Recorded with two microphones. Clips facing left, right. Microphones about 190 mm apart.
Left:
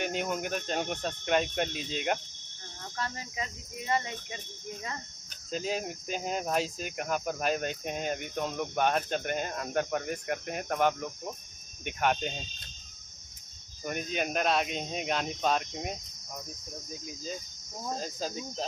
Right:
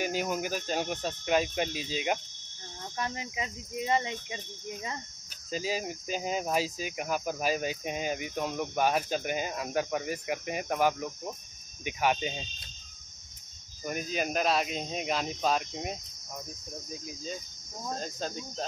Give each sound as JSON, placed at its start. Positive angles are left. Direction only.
{"t": 0.0, "sound": "speech", "side_deg": -5}
{"t": 3.0, "sound": "speech", "side_deg": -20}
{"t": 5.5, "sound": "speech", "side_deg": -5}
{"t": 13.8, "sound": "speech", "side_deg": 0}
{"t": 17.0, "sound": "speech", "side_deg": 0}